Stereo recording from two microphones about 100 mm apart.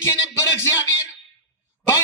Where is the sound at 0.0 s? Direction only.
30° left (ahead or behind).